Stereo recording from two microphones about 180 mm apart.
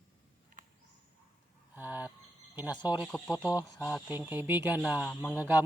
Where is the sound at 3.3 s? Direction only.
20° left (ahead or behind).